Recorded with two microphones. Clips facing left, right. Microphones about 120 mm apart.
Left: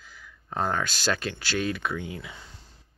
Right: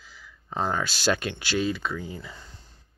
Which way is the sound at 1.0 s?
15° right (ahead or behind).